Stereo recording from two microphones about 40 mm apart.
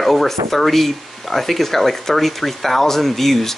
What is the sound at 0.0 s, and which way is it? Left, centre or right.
Speech, centre.